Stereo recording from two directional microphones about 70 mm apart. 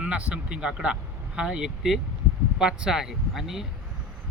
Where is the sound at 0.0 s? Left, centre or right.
Centre.